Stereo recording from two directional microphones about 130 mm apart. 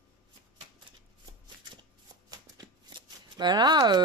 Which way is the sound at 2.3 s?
30° right (ahead or behind).